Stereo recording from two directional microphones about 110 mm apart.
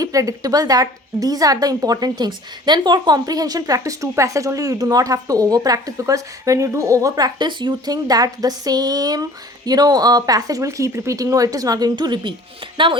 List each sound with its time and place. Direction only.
0.0 s a woman's voice: 30° right (ahead or behind); by 13.0 s 50° right (ahead or behind)